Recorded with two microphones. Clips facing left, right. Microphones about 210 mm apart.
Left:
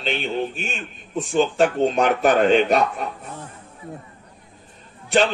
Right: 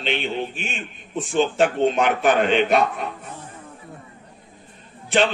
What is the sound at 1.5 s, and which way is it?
A man's voice, 40° left (ahead or behind).